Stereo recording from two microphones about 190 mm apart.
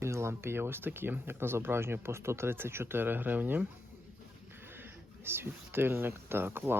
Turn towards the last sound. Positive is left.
turn(degrees=-10)  # may be behind; listen again after turning